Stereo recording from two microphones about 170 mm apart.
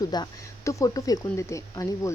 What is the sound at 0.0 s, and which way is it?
Speech, 25° left (ahead or behind).